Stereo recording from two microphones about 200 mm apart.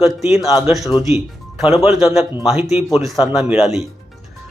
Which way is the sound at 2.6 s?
30° left (ahead or behind).